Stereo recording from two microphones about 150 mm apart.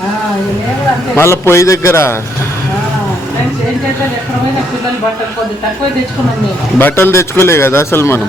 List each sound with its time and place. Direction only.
1.1 s a man's voice: 15° left (ahead or behind)
6.7 s a man's voice: 10° left (ahead or behind)